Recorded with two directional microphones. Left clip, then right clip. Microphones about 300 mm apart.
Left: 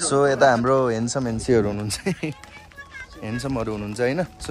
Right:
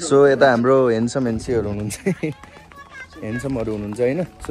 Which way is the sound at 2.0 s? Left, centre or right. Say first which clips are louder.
Right 4 dB; centre.